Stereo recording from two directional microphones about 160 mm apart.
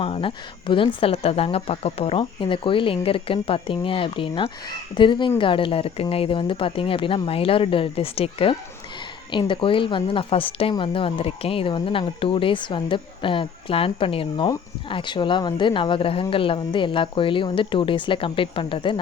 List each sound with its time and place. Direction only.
0.0 s speech: 35° left (ahead or behind)